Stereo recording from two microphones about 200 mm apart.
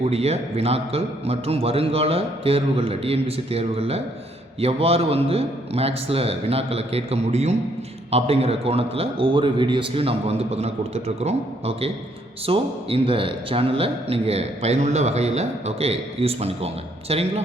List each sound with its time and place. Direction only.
0.0 s a man's voice: 30° right (ahead or behind)